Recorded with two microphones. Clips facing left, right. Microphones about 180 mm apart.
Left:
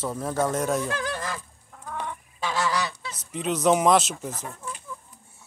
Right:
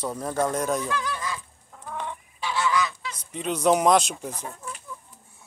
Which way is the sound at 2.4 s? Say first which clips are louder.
Right 1 dB; 40° left (ahead or behind).